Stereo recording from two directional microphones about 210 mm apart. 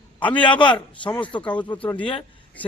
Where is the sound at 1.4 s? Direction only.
5° left (ahead or behind).